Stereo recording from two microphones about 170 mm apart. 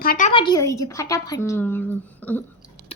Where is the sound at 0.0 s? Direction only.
55° left (ahead or behind).